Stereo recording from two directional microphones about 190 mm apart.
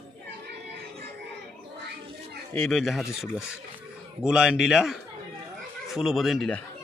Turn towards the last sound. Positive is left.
turn(degrees=0)  # may be behind; listen again after turning